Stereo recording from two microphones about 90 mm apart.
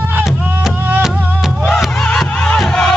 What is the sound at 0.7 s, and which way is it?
Music, 20° right (ahead or behind).